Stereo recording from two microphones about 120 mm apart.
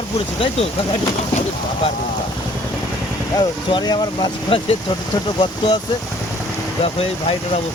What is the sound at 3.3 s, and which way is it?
Speech, 35° left (ahead or behind).